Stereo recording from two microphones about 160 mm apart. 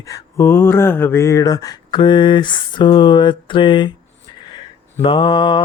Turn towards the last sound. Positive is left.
turn(degrees=30)  # may be behind; listen again after turning